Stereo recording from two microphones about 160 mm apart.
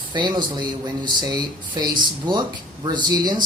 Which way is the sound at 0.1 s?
30° right (ahead or behind).